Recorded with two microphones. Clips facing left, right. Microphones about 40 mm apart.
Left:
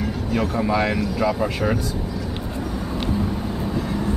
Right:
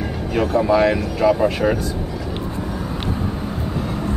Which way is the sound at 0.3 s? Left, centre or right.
Centre.